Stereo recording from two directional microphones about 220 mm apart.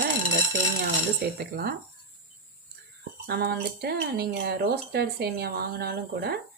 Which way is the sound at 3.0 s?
45° right (ahead or behind).